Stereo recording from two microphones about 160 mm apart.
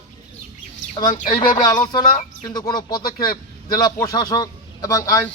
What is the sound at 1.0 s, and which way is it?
A man's voice, 25° left (ahead or behind).